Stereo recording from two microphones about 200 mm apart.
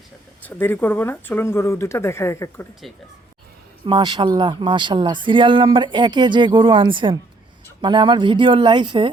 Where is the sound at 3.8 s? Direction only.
20° right (ahead or behind).